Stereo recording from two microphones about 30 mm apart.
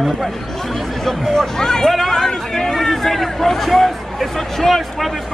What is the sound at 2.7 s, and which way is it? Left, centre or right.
Hubbub, centre.